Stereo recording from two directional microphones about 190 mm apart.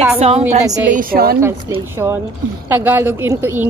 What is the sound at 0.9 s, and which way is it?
Speech, 50° right (ahead or behind).